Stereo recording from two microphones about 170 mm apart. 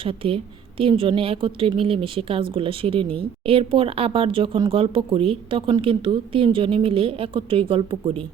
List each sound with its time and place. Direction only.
0.0 s a woman's voice: 30° right (ahead or behind)